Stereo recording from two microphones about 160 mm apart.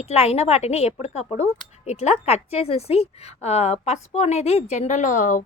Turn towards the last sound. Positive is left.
turn(degrees=55)  # may be behind; listen again after turning